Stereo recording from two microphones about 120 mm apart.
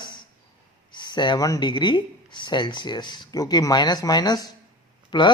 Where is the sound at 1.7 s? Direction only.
40° left (ahead or behind).